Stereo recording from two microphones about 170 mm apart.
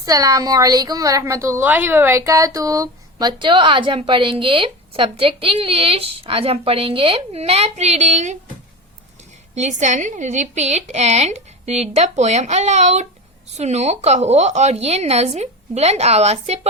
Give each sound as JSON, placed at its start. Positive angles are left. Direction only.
{"t": 0.0, "sound": "a woman's voice", "side_deg": -20}
{"t": 9.6, "sound": "a woman's voice", "side_deg": -45}